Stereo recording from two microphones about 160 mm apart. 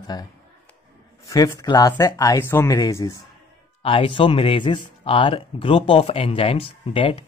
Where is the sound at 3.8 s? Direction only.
35° left (ahead or behind).